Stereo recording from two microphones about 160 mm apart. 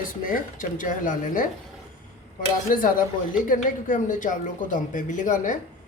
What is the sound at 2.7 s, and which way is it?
A woman's voice, 60° left (ahead or behind).